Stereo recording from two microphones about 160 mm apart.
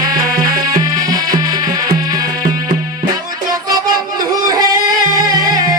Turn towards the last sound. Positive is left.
turn(degrees=-25)  # may be behind; listen again after turning